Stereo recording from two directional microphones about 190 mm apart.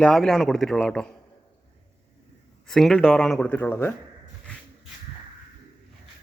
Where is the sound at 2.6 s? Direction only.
Centre (ahead or behind).